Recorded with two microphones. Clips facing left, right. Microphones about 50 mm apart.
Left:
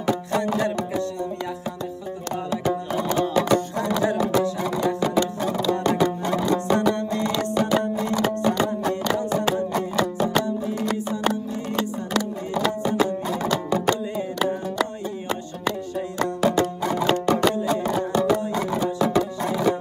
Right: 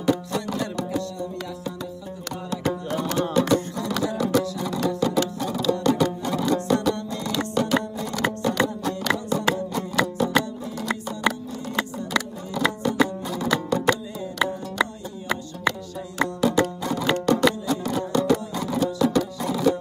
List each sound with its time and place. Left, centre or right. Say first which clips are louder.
0.0 s music: left 1 dB; left
2.9 s music: left 1 dB; left
12.5 s music: even; left
16.4 s music: left 1 dB; centre